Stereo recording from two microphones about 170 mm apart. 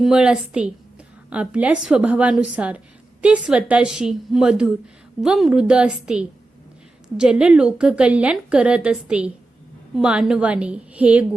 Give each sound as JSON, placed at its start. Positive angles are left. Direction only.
{"t": 0.0, "sound": "a woman's voice", "side_deg": -5}